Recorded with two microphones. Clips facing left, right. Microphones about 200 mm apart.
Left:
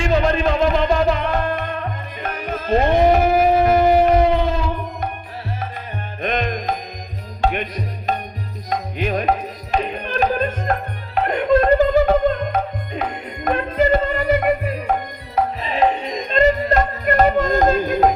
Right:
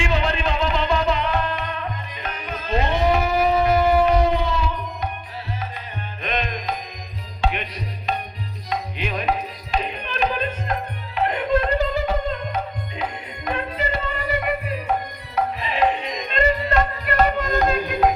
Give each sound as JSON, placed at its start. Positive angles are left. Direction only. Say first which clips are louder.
{"t": 0.0, "sound": "music", "louder": "left 5 dB", "side_deg": 45}
{"t": 6.2, "sound": "music", "louder": "left 5 dB", "side_deg": 45}